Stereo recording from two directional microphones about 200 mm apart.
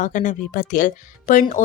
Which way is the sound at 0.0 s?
40° left (ahead or behind).